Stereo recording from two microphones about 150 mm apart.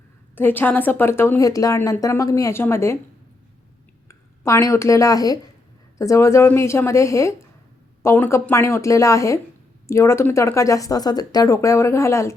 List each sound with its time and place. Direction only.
0.3 s a woman's voice: 15° left (ahead or behind)
4.1 s speech: 20° left (ahead or behind)